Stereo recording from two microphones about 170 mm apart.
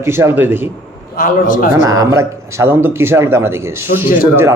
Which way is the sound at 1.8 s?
20° right (ahead or behind).